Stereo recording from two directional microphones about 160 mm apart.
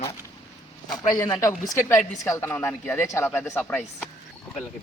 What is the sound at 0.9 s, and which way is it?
A man's voice, 25° left (ahead or behind).